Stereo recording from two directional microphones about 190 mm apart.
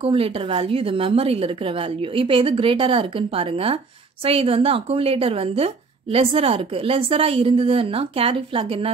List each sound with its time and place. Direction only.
0.0 s a woman's voice: 30° right (ahead or behind)